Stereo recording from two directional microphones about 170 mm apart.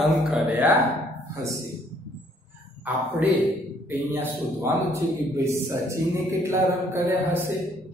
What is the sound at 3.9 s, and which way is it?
Speech, 10° right (ahead or behind).